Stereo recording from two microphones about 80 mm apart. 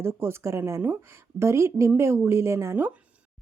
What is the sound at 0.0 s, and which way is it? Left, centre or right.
Speech, right.